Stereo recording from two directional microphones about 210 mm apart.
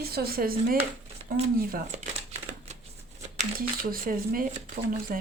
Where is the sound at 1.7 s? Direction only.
40° right (ahead or behind).